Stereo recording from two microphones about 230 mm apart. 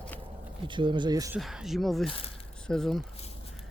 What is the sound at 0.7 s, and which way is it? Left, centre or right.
Speech, right.